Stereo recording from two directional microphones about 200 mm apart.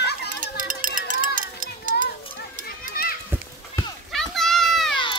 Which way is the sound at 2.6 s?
45° left (ahead or behind).